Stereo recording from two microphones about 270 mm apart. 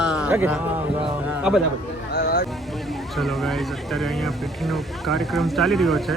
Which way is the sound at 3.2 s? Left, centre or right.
Centre.